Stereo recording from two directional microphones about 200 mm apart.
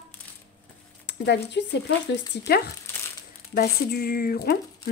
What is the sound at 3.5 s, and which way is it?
Speech, 50° left (ahead or behind).